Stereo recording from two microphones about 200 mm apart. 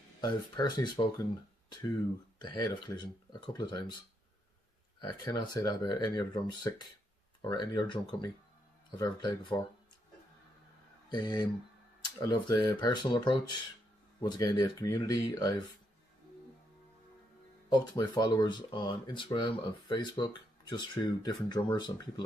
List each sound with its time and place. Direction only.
0.2 s speech: 20° left (ahead or behind)
2.4 s speech: 20° left (ahead or behind)
5.0 s speech: 20° left (ahead or behind)
11.1 s speech: 20° left (ahead or behind)
17.9 s speech: 20° left (ahead or behind)